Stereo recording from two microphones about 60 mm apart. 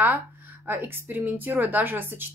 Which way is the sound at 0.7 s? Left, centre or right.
Right.